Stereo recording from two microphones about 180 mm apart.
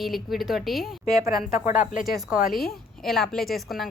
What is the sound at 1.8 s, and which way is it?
Speech, 45° left (ahead or behind).